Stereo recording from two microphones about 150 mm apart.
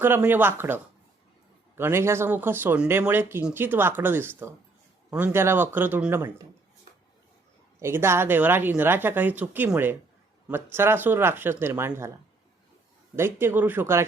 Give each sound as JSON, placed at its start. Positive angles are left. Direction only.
{"t": 0.0, "sound": "speech", "side_deg": -15}
{"t": 7.8, "sound": "speech", "side_deg": -15}
{"t": 13.1, "sound": "speech", "side_deg": -15}